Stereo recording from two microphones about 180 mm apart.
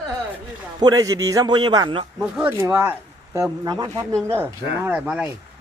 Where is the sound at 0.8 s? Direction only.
20° right (ahead or behind).